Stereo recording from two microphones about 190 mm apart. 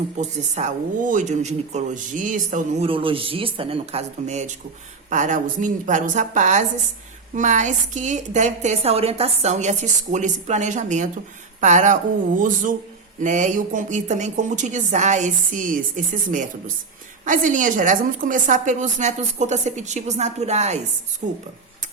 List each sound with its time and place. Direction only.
0.2 s speech: 35° right (ahead or behind)